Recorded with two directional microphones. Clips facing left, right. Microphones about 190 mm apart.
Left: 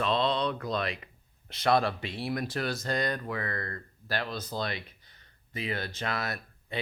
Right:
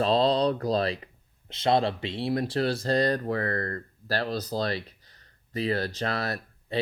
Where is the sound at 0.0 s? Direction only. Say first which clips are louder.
Right 5 dB; 35° right (ahead or behind).